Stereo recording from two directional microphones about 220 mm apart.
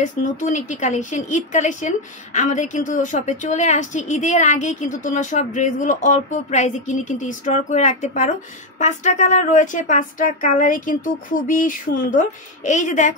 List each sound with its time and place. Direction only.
0.0 s speech: 35° left (ahead or behind)